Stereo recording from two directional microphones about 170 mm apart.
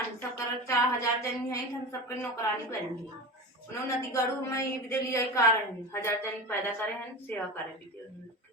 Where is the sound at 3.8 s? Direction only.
20° left (ahead or behind).